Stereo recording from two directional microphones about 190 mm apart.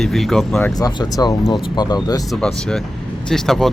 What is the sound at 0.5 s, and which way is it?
Speech, 10° left (ahead or behind).